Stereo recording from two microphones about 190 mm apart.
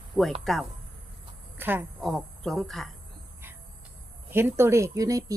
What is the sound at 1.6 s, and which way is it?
Speech, 10° right (ahead or behind).